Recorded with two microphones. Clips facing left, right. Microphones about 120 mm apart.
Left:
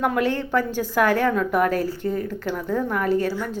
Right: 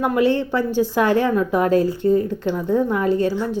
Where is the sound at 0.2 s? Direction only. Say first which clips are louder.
Right 4 dB; 15° right (ahead or behind).